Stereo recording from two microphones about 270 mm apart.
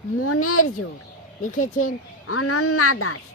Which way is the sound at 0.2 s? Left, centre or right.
Left.